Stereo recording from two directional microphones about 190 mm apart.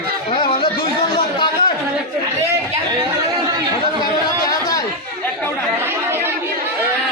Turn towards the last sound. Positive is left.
turn(degrees=-10)  # may be behind; listen again after turning